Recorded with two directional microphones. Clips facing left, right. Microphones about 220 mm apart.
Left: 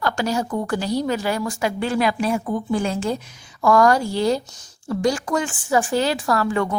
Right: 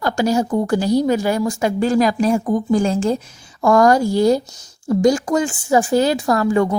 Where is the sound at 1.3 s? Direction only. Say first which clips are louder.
Right 5 dB; 25° right (ahead or behind).